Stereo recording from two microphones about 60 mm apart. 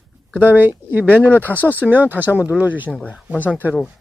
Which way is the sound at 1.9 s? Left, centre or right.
Right.